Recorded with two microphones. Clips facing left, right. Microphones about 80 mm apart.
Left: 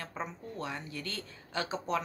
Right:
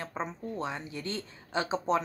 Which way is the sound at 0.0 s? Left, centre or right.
Right.